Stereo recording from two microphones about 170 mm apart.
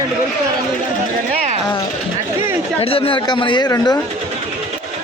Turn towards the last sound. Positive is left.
turn(degrees=20)  # may be behind; listen again after turning